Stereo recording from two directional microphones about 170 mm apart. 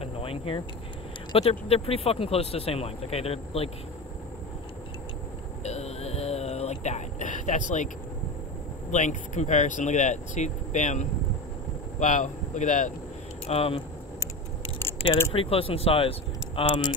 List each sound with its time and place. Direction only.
0.0 s a sound: 35° left (ahead or behind)
1.3 s speech: 30° left (ahead or behind)
5.6 s a sound: 40° left (ahead or behind)
8.9 s speech: 45° left (ahead or behind)
13.5 s speech: 35° left (ahead or behind)
15.3 s speech: 35° left (ahead or behind)